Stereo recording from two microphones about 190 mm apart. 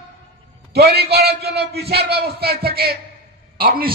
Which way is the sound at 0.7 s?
55° right (ahead or behind).